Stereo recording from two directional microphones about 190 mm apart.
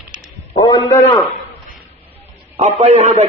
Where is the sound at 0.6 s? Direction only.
25° left (ahead or behind).